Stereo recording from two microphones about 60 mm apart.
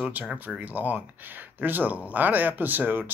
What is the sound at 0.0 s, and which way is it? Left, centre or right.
Speech, right.